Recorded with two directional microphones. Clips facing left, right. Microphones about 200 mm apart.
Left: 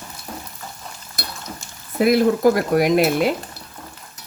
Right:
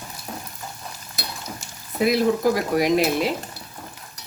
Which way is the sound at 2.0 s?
55° left (ahead or behind).